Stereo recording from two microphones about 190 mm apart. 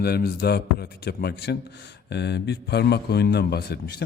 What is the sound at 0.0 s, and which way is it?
A man's voice, 55° left (ahead or behind).